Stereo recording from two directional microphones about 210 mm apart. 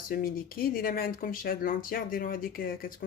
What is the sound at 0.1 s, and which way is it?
Speech, 45° left (ahead or behind).